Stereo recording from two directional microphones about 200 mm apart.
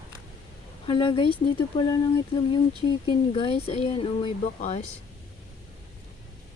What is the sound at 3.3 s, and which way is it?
Speech, 25° left (ahead or behind).